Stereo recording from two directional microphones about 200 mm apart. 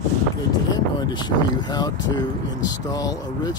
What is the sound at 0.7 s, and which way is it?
Speech, 20° left (ahead or behind).